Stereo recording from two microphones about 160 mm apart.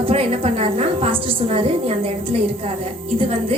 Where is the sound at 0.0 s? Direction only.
35° right (ahead or behind).